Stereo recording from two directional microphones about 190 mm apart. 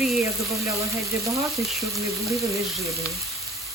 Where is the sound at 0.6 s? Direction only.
15° right (ahead or behind).